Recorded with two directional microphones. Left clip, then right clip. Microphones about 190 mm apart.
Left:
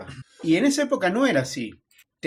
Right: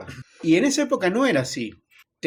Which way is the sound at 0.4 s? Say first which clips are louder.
Right 1 dB; 25° right (ahead or behind).